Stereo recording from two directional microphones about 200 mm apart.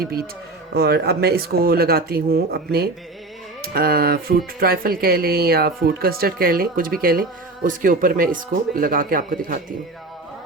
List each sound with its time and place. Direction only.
0.7 s speech: 55° right (ahead or behind)